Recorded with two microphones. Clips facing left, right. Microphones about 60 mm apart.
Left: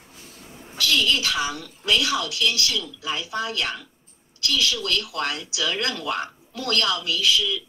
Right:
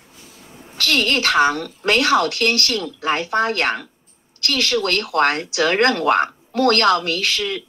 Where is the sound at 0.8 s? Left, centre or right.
Right.